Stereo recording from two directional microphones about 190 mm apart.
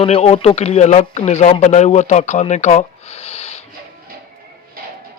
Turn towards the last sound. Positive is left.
turn(degrees=35)  # may be behind; listen again after turning